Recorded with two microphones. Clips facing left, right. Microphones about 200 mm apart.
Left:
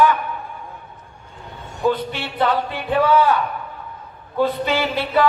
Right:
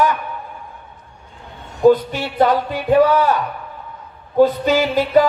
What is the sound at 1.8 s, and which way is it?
A man's voice, 40° right (ahead or behind).